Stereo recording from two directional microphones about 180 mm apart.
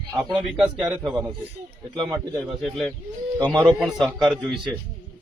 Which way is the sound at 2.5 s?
Centre (ahead or behind).